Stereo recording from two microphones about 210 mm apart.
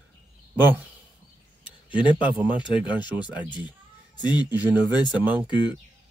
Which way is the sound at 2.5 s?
20° left (ahead or behind).